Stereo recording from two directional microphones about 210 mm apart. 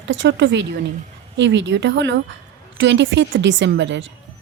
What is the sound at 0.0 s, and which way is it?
A woman's voice, 60° right (ahead or behind).